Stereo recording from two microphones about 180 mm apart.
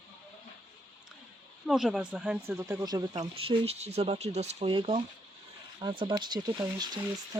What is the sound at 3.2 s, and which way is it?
Speech, 35° right (ahead or behind).